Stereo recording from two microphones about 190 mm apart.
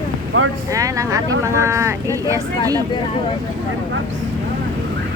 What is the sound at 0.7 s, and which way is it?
Speech, 15° right (ahead or behind).